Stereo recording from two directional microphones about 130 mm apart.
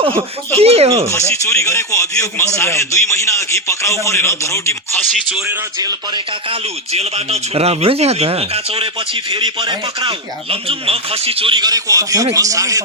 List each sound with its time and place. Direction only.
0.5 s speech: 50° right (ahead or behind)
1.3 s a man's voice: 20° left (ahead or behind)
5.8 s chopping: 30° right (ahead or behind)
6.9 s speech: 55° right (ahead or behind); by 12.8 s 25° right (ahead or behind)